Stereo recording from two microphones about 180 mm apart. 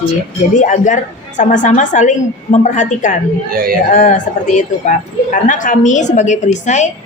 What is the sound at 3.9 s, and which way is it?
A woman's voice, 45° left (ahead or behind).